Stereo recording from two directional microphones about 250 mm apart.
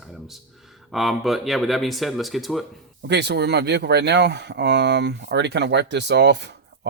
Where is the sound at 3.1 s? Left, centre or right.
Right.